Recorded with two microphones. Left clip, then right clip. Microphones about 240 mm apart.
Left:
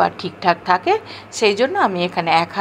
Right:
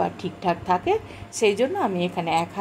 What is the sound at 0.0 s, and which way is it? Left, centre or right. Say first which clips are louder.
A woman's voice: left 8 dB; centre.